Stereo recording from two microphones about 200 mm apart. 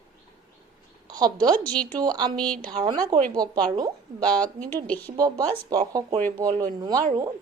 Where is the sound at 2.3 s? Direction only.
5° left (ahead or behind).